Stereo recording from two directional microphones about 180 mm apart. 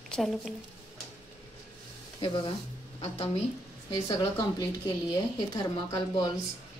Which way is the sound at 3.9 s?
25° left (ahead or behind).